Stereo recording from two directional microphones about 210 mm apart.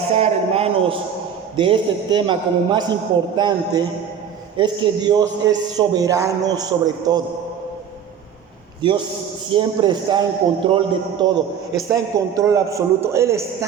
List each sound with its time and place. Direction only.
0.1 s a man's voice: 30° right (ahead or behind)
8.8 s a man's voice: 20° right (ahead or behind)